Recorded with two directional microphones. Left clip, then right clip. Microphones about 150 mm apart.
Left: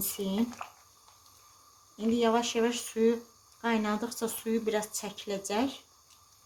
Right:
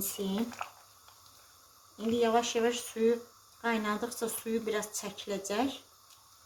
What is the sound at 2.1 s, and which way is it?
Speech, 40° left (ahead or behind).